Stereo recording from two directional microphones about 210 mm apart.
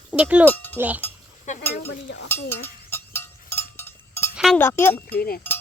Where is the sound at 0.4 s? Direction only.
10° left (ahead or behind).